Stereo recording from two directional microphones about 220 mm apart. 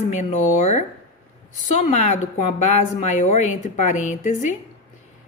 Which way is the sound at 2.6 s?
30° left (ahead or behind).